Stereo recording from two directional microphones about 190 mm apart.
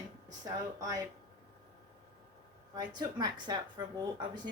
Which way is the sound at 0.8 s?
20° right (ahead or behind).